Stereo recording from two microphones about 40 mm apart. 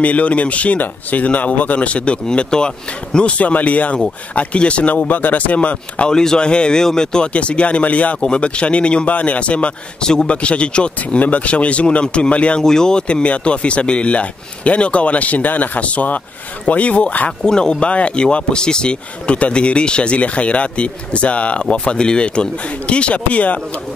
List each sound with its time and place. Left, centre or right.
0.0 s speech: left
3.3 s speech: left
5.0 s speech: left
6.0 s speech: centre
7.3 s speech: left
10.0 s speech: centre
11.1 s speech: left
12.6 s speech: centre; by 17.3 s left
17.5 s speech: centre; by 23.6 s left